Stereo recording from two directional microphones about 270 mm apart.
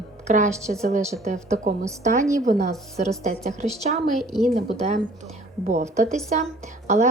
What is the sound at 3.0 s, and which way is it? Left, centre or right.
Speech, right.